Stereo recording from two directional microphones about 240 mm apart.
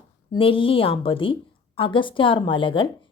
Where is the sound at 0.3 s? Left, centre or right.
Left.